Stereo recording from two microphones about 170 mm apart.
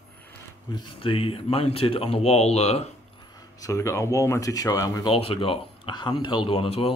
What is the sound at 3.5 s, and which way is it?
Speech, 20° left (ahead or behind).